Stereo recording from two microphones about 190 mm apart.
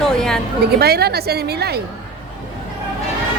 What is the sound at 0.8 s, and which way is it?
A woman's voice, 55° right (ahead or behind).